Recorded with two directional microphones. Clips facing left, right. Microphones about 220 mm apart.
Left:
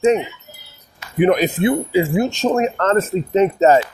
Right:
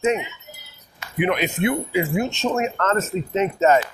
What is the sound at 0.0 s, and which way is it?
Speech, 30° left (ahead or behind).